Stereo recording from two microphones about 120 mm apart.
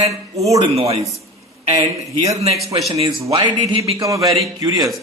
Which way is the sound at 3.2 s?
40° right (ahead or behind).